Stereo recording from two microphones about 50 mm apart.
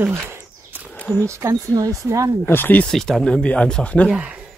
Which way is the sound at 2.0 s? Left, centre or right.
Right.